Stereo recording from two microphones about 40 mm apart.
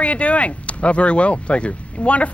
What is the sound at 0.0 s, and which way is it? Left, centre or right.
Speech, left.